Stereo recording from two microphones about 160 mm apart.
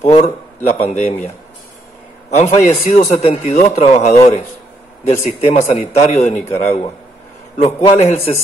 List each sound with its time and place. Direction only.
0.7 s a man's voice: 45° left (ahead or behind)
2.3 s a man's voice: 40° left (ahead or behind)